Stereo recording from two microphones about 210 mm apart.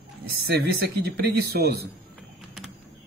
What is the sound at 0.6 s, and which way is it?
Speech, 50° right (ahead or behind).